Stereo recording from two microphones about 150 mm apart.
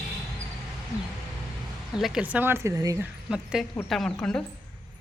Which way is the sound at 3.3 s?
5° right (ahead or behind).